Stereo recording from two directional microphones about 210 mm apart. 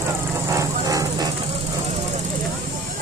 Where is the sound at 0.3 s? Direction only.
15° right (ahead or behind).